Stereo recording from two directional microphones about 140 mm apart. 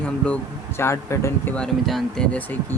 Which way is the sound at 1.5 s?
5° left (ahead or behind).